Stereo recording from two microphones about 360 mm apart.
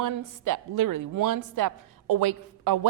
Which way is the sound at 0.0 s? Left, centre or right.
Right.